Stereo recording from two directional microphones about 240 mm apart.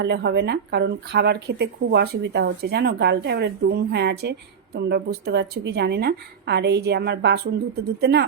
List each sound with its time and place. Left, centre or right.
0.0 s speech: right